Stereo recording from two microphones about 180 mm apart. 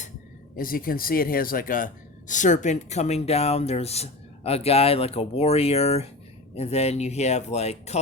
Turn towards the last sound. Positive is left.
turn(degrees=35)  # may be behind; listen again after turning